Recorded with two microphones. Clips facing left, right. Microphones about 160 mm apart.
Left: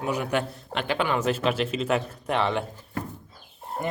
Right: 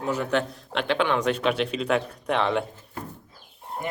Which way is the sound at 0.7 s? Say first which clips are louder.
Right 2 dB; 5° left (ahead or behind).